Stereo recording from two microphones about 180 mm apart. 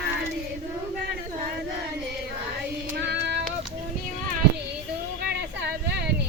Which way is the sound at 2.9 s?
70° right (ahead or behind).